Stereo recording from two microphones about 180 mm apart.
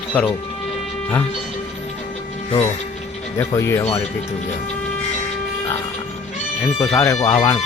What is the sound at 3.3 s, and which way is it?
Speech, 15° left (ahead or behind).